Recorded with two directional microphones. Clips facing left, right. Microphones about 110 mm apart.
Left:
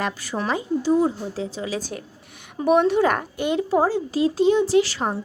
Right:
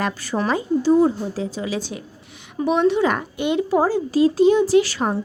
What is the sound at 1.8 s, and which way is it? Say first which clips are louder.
A woman's voice: right 1 dB; 45° left (ahead or behind).